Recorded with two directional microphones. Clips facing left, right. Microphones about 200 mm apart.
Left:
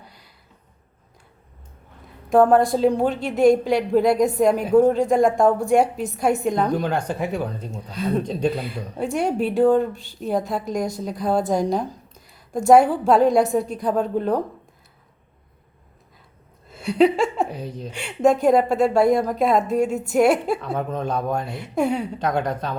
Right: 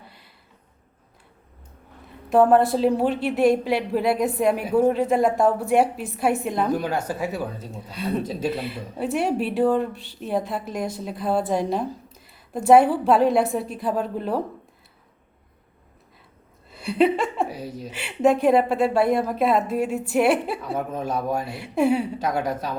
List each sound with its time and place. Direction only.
0.0 s a sound: centre (ahead or behind)
2.3 s a woman's voice: 5° right (ahead or behind)
9.9 s speech: 40° left (ahead or behind)
10.5 s a woman's voice: 5° right (ahead or behind)
12.9 s a woman's voice: 5° right (ahead or behind)
16.8 s a woman's voice: 5° right (ahead or behind)